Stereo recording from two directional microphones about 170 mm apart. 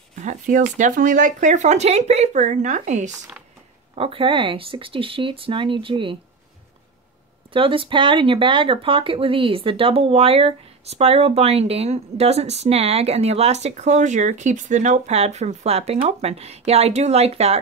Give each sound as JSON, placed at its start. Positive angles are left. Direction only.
{"t": 0.1, "sound": "speech", "side_deg": -45}
{"t": 3.9, "sound": "speech", "side_deg": -35}
{"t": 7.5, "sound": "speech", "side_deg": -30}